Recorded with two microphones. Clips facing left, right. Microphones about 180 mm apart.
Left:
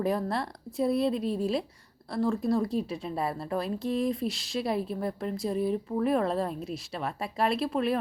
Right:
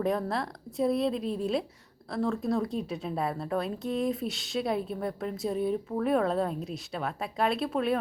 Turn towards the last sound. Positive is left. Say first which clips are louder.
# even
turn(degrees=0)  # may be behind; listen again after turning